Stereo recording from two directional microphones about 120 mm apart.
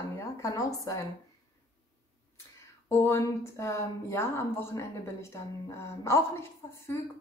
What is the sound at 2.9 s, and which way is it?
A woman's voice, 20° left (ahead or behind).